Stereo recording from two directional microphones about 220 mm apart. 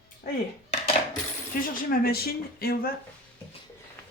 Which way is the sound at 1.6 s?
40° left (ahead or behind).